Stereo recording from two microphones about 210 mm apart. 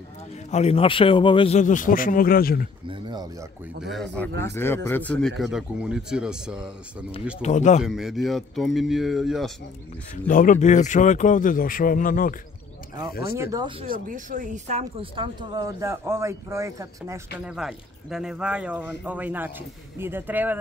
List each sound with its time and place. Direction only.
0.5 s a man's voice: 30° left (ahead or behind)
2.9 s speech: 20° right (ahead or behind)
4.6 s a man's voice: 10° left (ahead or behind)
7.4 s a man's voice: 35° left (ahead or behind)
7.8 s a man's voice: centre (ahead or behind)
10.2 s a man's voice: 40° left (ahead or behind)
13.4 s speech: 15° right (ahead or behind)
13.8 s speech: 40° right (ahead or behind); by 17.6 s 15° right (ahead or behind)
17.6 s a man's voice: centre (ahead or behind)